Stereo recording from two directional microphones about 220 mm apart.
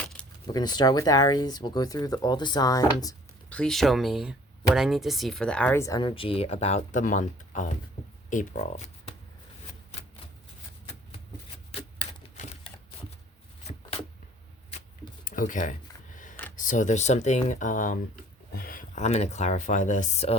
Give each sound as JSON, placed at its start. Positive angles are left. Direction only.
{"t": 0.4, "sound": "speech", "side_deg": 20}
{"t": 3.5, "sound": "speech", "side_deg": 5}
{"t": 15.2, "sound": "a sound", "side_deg": 35}
{"t": 16.6, "sound": "speech", "side_deg": 35}